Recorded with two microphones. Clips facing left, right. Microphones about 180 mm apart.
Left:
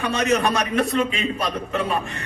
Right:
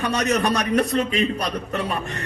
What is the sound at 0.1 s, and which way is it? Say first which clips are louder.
A man's voice: left 2 dB; 40° right (ahead or behind).